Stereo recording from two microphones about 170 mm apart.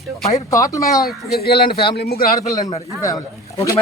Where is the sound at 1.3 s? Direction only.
65° left (ahead or behind).